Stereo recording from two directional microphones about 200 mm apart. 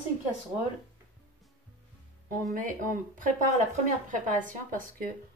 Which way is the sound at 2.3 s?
40° right (ahead or behind).